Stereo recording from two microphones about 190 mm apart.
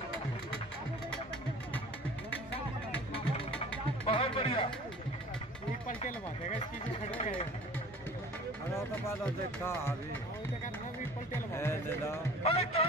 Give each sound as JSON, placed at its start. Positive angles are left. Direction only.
{"t": 4.0, "sound": "music", "side_deg": 30}
{"t": 5.9, "sound": "speech", "side_deg": 45}
{"t": 8.9, "sound": "speech", "side_deg": 10}
{"t": 11.3, "sound": "speech", "side_deg": 15}
{"t": 12.4, "sound": "speech", "side_deg": 30}